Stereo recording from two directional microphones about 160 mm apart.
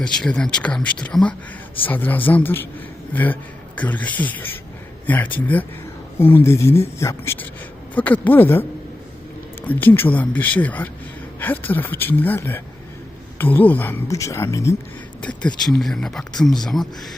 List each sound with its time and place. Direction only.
0.0 s speech: 5° left (ahead or behind)
9.6 s speech: 10° left (ahead or behind)
15.4 s speech: 5° left (ahead or behind)